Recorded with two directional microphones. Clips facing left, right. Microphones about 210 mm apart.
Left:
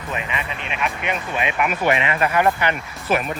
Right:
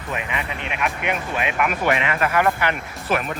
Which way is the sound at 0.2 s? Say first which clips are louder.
Even; 15° right (ahead or behind).